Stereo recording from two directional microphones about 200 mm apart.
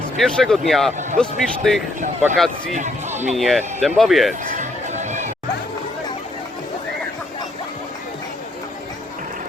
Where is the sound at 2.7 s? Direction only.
35° right (ahead or behind).